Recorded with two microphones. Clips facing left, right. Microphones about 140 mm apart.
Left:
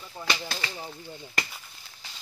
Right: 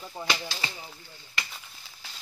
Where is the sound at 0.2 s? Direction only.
15° right (ahead or behind).